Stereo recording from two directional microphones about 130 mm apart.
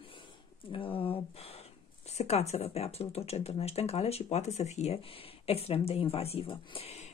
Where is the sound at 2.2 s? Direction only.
55° left (ahead or behind).